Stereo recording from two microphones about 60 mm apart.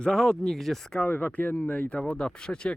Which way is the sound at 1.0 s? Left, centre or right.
Left.